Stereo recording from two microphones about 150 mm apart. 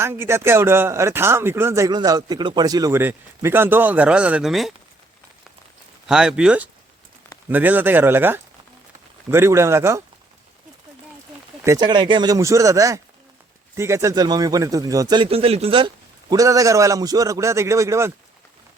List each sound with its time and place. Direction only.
0.0 s speech: 15° right (ahead or behind)
6.1 s speech: 5° right (ahead or behind)
11.6 s speech: 25° right (ahead or behind)
16.3 s speech: 20° right (ahead or behind)